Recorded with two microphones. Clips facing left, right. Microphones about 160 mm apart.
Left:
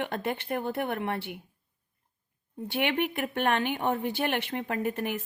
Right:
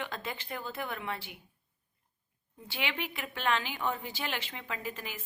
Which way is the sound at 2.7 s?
60° left (ahead or behind).